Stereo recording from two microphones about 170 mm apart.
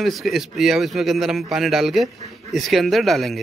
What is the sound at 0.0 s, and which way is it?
A man's voice, centre (ahead or behind).